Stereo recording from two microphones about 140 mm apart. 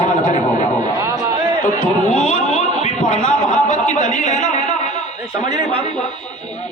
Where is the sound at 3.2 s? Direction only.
60° left (ahead or behind).